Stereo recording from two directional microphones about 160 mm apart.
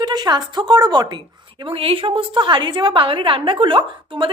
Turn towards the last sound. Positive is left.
turn(degrees=-30)  # may be behind; listen again after turning